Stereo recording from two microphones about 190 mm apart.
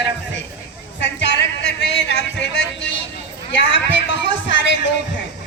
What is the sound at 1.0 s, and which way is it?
Music, 70° left (ahead or behind).